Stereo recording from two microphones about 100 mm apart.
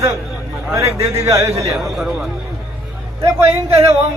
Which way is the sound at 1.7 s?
Centre (ahead or behind).